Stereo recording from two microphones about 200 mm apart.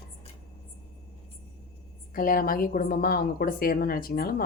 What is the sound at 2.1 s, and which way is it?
Speech, 45° left (ahead or behind).